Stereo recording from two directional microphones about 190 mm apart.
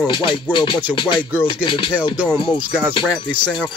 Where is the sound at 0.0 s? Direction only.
25° left (ahead or behind).